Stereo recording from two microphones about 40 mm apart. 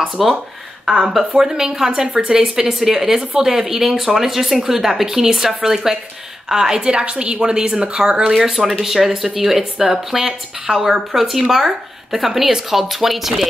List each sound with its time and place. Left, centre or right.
0.2 s a woman's voice: centre
8.5 s a woman's voice: centre